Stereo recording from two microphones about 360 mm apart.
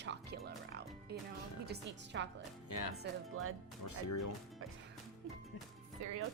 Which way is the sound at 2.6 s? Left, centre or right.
Left.